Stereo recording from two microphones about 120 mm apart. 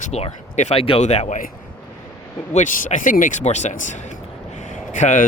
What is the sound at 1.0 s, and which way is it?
Speech, 70° left (ahead or behind).